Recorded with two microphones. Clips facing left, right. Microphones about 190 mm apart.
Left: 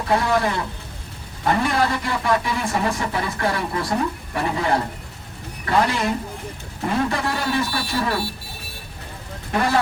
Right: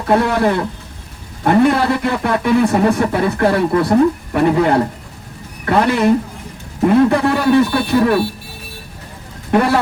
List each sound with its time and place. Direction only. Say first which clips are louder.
0.1 s speech: right 6 dB; 55° right (ahead or behind)